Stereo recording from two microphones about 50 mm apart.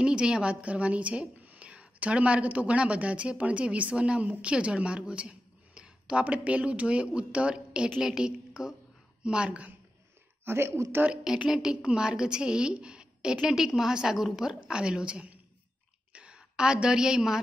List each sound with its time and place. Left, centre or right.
0.0 s a woman's voice: centre
10.4 s speech: right
11.3 s a woman's voice: right
16.1 s a sound: right